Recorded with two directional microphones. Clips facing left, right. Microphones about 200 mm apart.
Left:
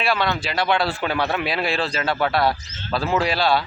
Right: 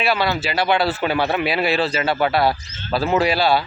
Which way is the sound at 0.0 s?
5° right (ahead or behind).